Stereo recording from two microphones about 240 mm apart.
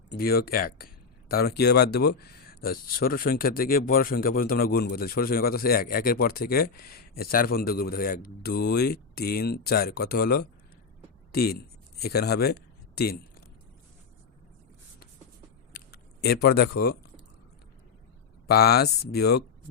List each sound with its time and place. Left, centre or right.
0.1 s speech: left
11.4 s speech: left
15.7 s a sound: left
18.4 s speech: left